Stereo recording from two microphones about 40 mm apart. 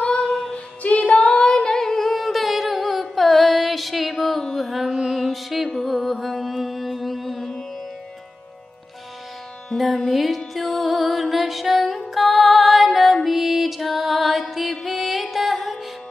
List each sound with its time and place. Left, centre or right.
0.0 s female singing: left
0.3 s female singing: centre
0.8 s female singing: left; by 4.4 s centre
4.6 s music: centre
9.8 s music: centre